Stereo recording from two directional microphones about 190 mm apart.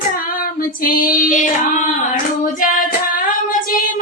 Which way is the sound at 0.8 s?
50° left (ahead or behind).